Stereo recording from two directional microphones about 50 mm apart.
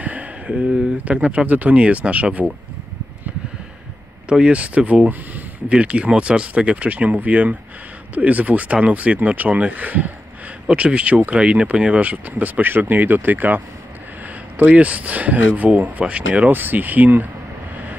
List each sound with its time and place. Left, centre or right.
0.0 s speech: right
4.3 s speech: right
16.5 s speech: right